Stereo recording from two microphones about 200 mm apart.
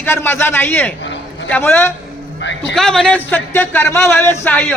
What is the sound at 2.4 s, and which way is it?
Speech, 60° left (ahead or behind).